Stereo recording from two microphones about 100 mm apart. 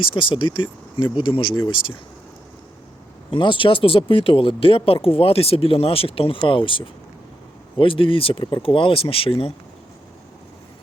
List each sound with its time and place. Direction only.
0.0 s speech: 60° left (ahead or behind)
3.3 s speech: 55° left (ahead or behind)